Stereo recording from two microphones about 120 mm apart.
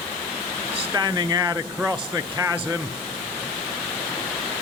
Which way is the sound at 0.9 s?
30° right (ahead or behind).